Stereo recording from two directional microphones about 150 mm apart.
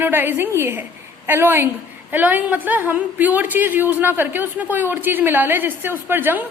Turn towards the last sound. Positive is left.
turn(degrees=-15)  # may be behind; listen again after turning